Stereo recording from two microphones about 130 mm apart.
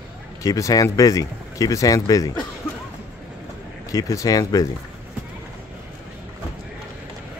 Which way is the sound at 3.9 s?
25° left (ahead or behind).